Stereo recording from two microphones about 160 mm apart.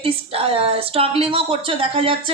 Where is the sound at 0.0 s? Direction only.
35° right (ahead or behind).